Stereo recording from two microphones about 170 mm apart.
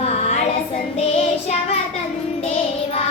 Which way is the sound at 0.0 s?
40° left (ahead or behind).